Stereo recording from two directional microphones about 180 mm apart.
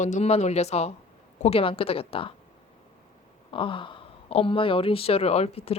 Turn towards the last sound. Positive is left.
turn(degrees=35)  # may be behind; listen again after turning